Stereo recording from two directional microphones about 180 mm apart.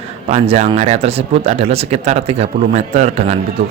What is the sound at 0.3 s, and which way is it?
Speech, 40° right (ahead or behind).